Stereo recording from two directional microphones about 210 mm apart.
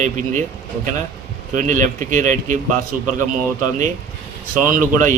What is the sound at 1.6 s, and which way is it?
Speech, 35° right (ahead or behind).